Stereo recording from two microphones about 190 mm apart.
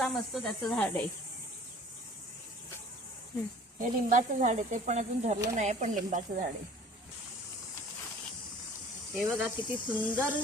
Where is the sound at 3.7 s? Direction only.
40° right (ahead or behind).